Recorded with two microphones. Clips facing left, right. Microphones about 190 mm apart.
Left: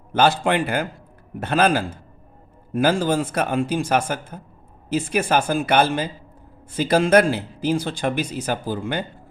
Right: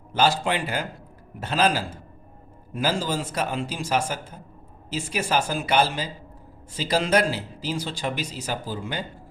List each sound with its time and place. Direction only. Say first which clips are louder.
0.1 s speech: left 4 dB; 55° left (ahead or behind)